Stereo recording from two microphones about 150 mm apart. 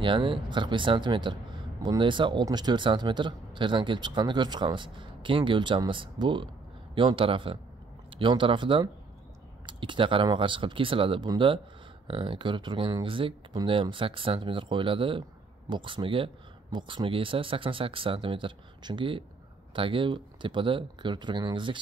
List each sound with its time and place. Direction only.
0.0 s speech: 35° right (ahead or behind)